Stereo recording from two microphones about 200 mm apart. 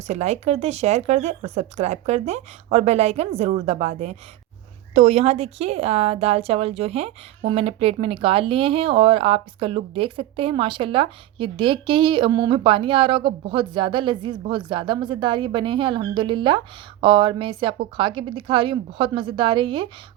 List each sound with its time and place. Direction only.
0.1 s a woman's voice: 35° right (ahead or behind)